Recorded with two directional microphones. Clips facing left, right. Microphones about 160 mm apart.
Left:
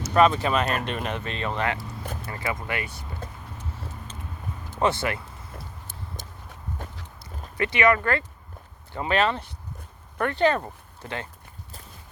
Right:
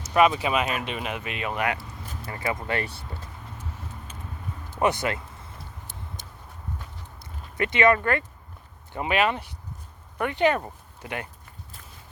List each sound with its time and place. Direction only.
0.1 s speech: 10° right (ahead or behind)
2.5 s speech: 30° right (ahead or behind)
4.8 s speech: 15° right (ahead or behind)
7.5 s speech: 25° right (ahead or behind)